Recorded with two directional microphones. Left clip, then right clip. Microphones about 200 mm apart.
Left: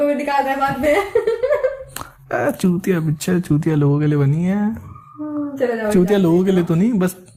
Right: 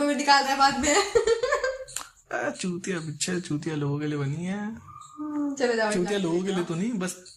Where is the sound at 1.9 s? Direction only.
35° left (ahead or behind).